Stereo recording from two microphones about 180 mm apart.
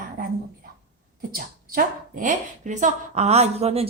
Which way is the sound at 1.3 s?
55° right (ahead or behind).